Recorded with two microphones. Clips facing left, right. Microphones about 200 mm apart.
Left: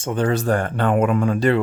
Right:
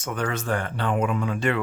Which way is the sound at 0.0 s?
30° left (ahead or behind).